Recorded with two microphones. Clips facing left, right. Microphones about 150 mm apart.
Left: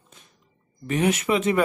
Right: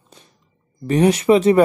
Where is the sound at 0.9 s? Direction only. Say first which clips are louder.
Right 8 dB; 35° right (ahead or behind).